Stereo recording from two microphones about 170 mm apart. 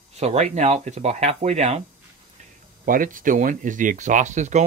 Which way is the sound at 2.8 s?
55° right (ahead or behind).